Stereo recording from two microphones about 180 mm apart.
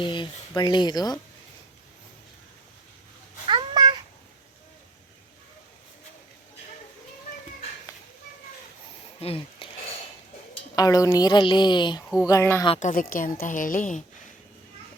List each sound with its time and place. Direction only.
0.0 s speech: 25° left (ahead or behind)
3.4 s a sound: 25° right (ahead or behind)
9.2 s speech: 30° left (ahead or behind)
10.8 s speech: 20° left (ahead or behind)
12.8 s a woman's voice: 50° left (ahead or behind)